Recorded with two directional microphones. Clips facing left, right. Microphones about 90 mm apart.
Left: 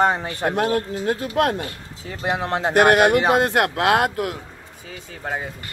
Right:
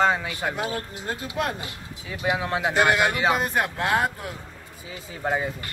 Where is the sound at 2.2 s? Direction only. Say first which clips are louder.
Left 2 dB; 50° left (ahead or behind); by 4.3 s 80° left.